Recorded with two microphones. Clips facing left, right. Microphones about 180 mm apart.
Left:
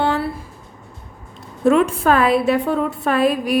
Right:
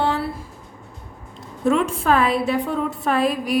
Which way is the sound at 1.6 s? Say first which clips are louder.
Left 4 dB; 60° left (ahead or behind).